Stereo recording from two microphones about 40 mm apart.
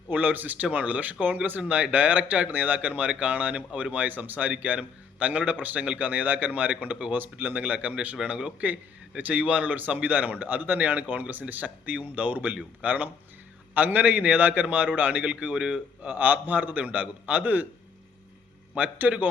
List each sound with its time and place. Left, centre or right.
0.1 s speech: right
1.6 s speech: right
4.7 s speech: right
7.1 s speech: right
8.3 s a man's voice: right
8.6 s speech: right
15.3 s speech: right
16.0 s speech: right
18.8 s speech: right